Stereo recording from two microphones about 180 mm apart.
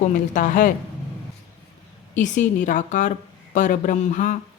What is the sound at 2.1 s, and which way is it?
Speech, 45° left (ahead or behind).